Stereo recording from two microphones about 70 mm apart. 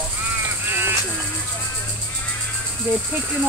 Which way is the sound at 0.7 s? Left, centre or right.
Right.